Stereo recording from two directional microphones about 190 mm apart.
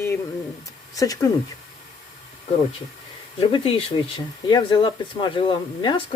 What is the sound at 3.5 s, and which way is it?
Speech, 30° left (ahead or behind).